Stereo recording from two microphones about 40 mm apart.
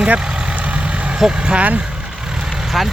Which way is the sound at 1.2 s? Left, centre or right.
Right.